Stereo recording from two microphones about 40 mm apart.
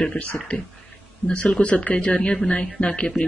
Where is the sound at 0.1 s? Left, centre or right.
Left.